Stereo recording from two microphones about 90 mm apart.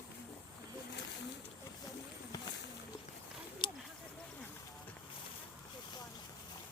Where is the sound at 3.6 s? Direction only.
60° left (ahead or behind).